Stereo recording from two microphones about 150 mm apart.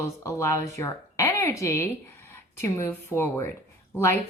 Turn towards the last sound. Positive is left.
turn(degrees=15)  # may be behind; listen again after turning